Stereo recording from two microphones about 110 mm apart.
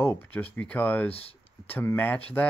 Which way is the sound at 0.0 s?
20° left (ahead or behind).